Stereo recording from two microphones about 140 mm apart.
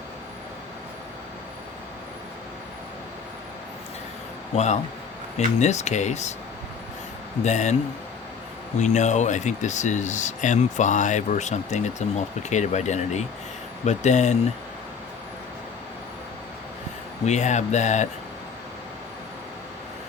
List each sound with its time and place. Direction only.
4.5 s speech: 55° left (ahead or behind)
7.4 s speech: 55° left (ahead or behind)
8.8 s speech: 55° left (ahead or behind)
17.2 s speech: 55° left (ahead or behind)